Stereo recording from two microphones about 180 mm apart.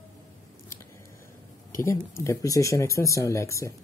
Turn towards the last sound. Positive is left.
turn(degrees=15)  # may be behind; listen again after turning